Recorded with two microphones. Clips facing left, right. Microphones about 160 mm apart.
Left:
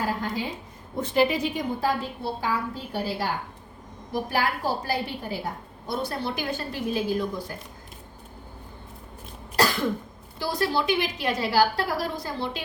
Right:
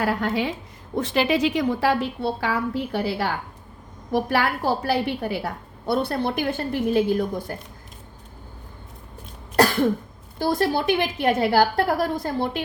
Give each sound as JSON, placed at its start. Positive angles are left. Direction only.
{"t": 0.0, "sound": "a woman's voice", "side_deg": -75}
{"t": 10.3, "sound": "a woman's voice", "side_deg": -50}